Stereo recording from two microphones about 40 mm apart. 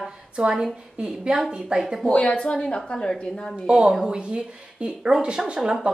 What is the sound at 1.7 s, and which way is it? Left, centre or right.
Speech, right.